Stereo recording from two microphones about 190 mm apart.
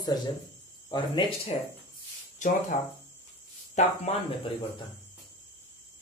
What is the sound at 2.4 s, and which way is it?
Speech, 40° left (ahead or behind).